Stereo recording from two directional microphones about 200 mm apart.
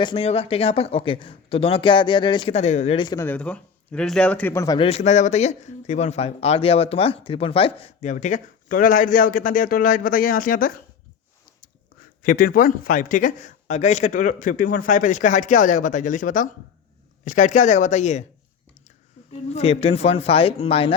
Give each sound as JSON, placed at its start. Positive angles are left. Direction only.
{"t": 0.0, "sound": "speech", "side_deg": 25}
{"t": 4.9, "sound": "speech", "side_deg": 35}
{"t": 12.2, "sound": "speech", "side_deg": 45}